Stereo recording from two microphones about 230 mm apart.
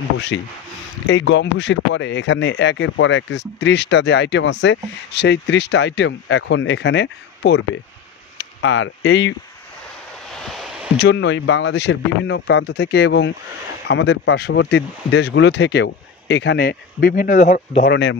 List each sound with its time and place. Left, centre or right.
0.3 s speech: left
10.3 s a sound: centre
11.0 s speech: left
17.8 s speech: left